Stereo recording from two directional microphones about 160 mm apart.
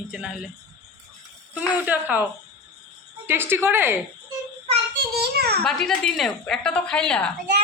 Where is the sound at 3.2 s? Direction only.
15° right (ahead or behind).